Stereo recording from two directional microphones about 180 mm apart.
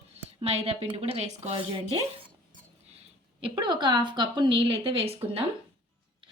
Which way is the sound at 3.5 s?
25° right (ahead or behind).